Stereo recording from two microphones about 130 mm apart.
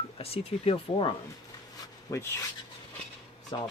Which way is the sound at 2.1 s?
20° left (ahead or behind).